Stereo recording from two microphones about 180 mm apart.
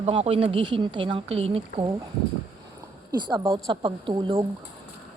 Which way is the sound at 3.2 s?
25° right (ahead or behind).